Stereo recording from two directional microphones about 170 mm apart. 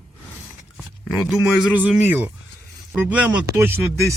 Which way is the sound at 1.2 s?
Centre (ahead or behind).